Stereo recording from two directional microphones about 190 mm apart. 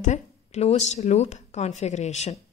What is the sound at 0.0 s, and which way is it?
Speech, 40° left (ahead or behind).